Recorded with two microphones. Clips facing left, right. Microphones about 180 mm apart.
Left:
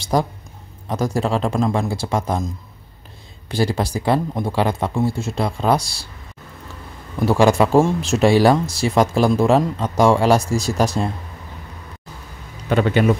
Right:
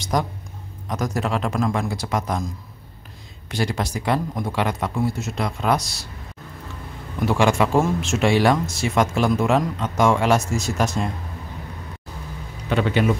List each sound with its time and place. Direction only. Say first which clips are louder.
0.0 s a man's voice: left 4 dB; 30° left (ahead or behind)
7.2 s speech: left 4 dB; 40° left (ahead or behind)
12.6 s speech: left 4 dB; 45° left (ahead or behind)